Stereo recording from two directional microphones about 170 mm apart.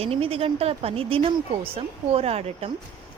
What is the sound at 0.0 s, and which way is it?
Speech, 35° right (ahead or behind).